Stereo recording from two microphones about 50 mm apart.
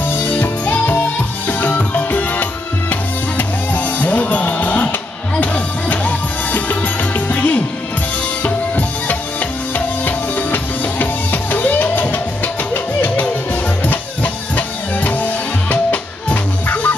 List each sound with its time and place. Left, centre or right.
0.3 s music: left